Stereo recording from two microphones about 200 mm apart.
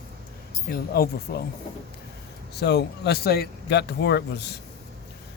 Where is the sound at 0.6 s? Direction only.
50° left (ahead or behind).